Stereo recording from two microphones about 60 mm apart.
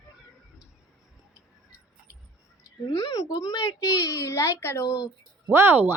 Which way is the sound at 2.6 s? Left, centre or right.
Left.